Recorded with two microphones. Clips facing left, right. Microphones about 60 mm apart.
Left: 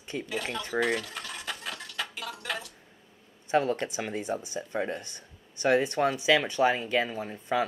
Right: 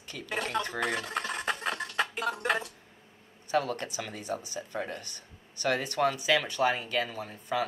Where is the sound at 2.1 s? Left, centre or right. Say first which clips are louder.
Right 6 dB; right.